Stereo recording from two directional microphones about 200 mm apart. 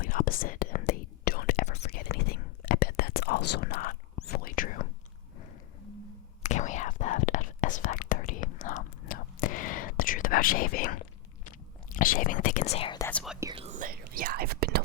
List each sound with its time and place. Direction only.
0.0 s whispering: 45° left (ahead or behind)
1.9 s whispering: 50° left (ahead or behind)
6.4 s whispering: 35° left (ahead or behind)
13.1 s whispering: 5° left (ahead or behind)
13.5 s whispering: 25° right (ahead or behind)
13.7 s whispering: 40° right (ahead or behind)